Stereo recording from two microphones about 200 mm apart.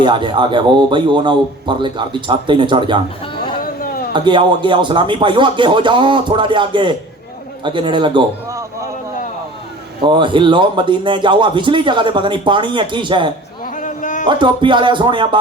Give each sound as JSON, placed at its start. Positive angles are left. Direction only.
{"t": 0.0, "sound": "speech", "side_deg": -25}
{"t": 3.6, "sound": "a sound", "side_deg": 45}
{"t": 4.1, "sound": "a man's voice", "side_deg": -25}
{"t": 10.0, "sound": "speech", "side_deg": -25}
{"t": 13.7, "sound": "a sound", "side_deg": 40}
{"t": 14.3, "sound": "speech", "side_deg": -25}